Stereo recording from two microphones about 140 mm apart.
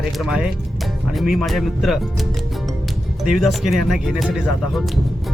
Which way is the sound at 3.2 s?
Centre (ahead or behind).